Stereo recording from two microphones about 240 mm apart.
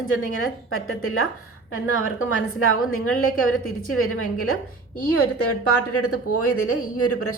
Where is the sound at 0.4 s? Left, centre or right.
Left.